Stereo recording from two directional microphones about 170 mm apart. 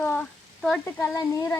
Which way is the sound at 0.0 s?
5° left (ahead or behind).